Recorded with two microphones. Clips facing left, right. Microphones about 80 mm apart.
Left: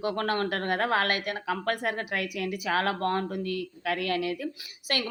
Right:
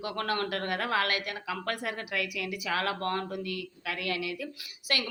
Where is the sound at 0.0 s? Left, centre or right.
Left.